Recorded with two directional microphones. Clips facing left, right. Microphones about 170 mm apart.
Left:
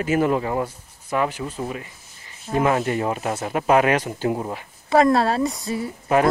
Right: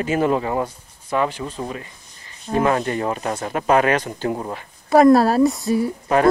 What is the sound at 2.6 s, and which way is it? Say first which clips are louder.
Speech: right 1 dB; 35° right (ahead or behind).